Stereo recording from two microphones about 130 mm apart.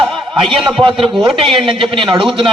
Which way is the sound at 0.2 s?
40° right (ahead or behind).